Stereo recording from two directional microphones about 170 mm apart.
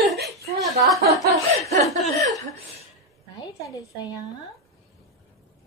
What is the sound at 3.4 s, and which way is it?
Speech, 25° left (ahead or behind).